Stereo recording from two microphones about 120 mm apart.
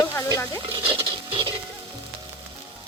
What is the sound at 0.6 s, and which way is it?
Speech, 50° right (ahead or behind).